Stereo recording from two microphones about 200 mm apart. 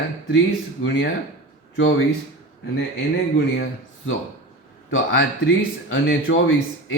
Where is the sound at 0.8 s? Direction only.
90° left.